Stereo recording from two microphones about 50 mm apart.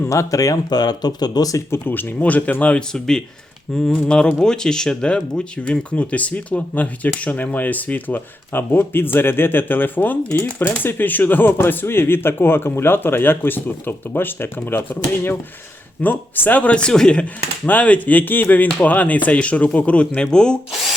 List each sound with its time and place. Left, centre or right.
0.1 s speech: left
1.7 s speech: left
2.1 s speech: left
2.7 s speech: centre
6.0 s speech: left
17.7 s speech: left